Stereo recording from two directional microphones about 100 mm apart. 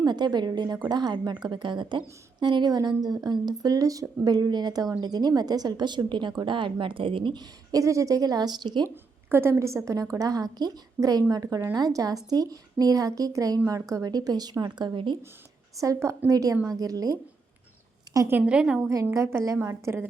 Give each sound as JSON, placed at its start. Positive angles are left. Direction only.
{"t": 0.0, "sound": "a woman's voice", "side_deg": -45}
{"t": 7.7, "sound": "a woman's voice", "side_deg": -35}
{"t": 9.3, "sound": "a woman's voice", "side_deg": -25}
{"t": 15.8, "sound": "a woman's voice", "side_deg": -30}
{"t": 18.3, "sound": "a woman's voice", "side_deg": -15}
{"t": 18.8, "sound": "a woman's voice", "side_deg": -30}